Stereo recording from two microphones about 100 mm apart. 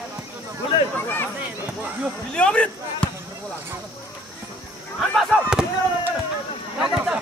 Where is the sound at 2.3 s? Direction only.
10° left (ahead or behind).